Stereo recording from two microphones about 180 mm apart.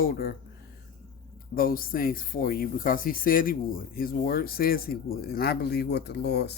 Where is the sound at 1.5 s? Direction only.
55° left (ahead or behind).